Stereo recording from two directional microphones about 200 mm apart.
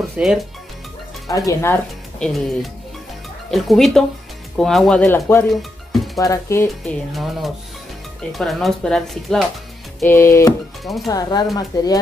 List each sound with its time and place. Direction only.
0.2 s speech: 5° right (ahead or behind)
1.2 s speech: 15° left (ahead or behind)
6.1 s music: 15° left (ahead or behind)
6.8 s speech: centre (ahead or behind)
9.9 s music: 10° left (ahead or behind)
10.8 s speech: centre (ahead or behind)
11.1 s speech: 20° left (ahead or behind)